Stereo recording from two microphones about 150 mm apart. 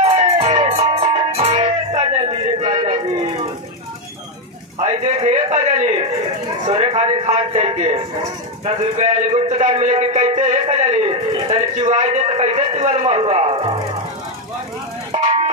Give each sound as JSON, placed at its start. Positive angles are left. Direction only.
{"t": 0.0, "sound": "music", "side_deg": -40}
{"t": 2.7, "sound": "a sound", "side_deg": -45}
{"t": 4.7, "sound": "a man's voice", "side_deg": -45}